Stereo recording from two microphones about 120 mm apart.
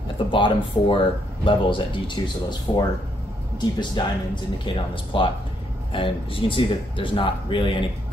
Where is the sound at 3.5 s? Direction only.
35° left (ahead or behind).